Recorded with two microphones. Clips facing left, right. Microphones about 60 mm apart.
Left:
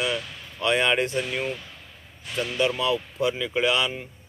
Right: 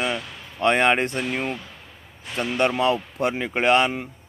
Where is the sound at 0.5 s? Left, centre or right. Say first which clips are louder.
Right 3 dB; right.